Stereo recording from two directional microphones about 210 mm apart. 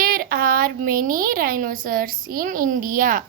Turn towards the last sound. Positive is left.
turn(degrees=-40)  # may be behind; listen again after turning